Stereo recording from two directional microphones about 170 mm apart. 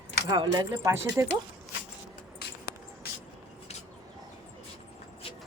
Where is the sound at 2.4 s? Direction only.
65° left (ahead or behind).